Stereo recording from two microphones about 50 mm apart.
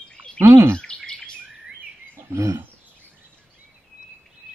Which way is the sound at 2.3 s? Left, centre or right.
Right.